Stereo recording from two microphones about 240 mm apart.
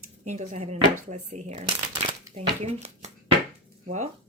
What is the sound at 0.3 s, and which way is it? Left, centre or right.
Speech, right.